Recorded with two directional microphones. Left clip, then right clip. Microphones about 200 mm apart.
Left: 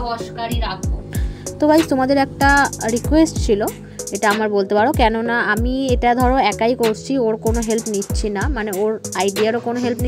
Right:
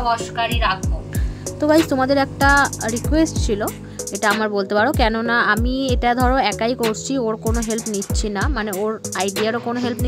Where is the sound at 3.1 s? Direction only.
15° left (ahead or behind).